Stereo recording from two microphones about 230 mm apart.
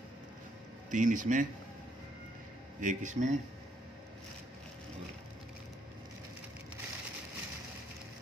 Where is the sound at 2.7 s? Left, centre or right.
Right.